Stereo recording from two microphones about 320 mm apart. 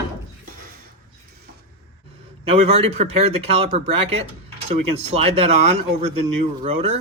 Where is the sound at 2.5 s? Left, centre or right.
Centre.